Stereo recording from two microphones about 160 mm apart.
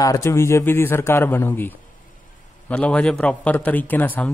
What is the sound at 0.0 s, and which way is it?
A man's voice, 20° left (ahead or behind).